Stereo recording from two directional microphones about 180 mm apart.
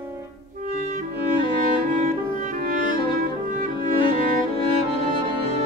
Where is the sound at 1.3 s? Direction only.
25° left (ahead or behind).